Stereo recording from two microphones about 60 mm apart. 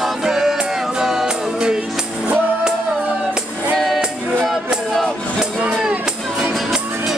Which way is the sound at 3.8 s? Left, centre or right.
Centre.